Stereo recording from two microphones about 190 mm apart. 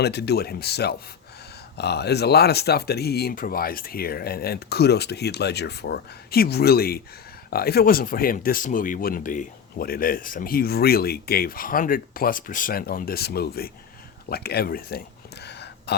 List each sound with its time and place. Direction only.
0.0 s speech: 60° left (ahead or behind)